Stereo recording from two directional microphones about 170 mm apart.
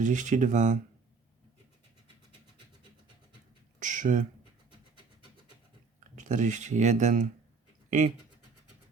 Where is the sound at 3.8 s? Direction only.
50° right (ahead or behind).